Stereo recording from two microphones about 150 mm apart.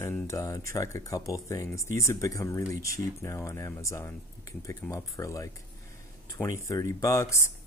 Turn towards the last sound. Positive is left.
turn(degrees=20)  # may be behind; listen again after turning